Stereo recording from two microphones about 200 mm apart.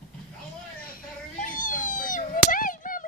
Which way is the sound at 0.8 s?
45° left (ahead or behind).